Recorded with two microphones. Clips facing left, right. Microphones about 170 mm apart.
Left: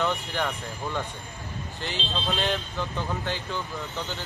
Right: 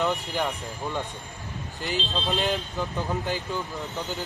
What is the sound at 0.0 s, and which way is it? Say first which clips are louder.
Speech: right 1 dB; centre (ahead or behind).